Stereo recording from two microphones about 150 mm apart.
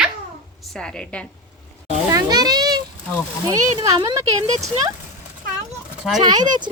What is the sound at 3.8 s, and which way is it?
Speech, 20° right (ahead or behind).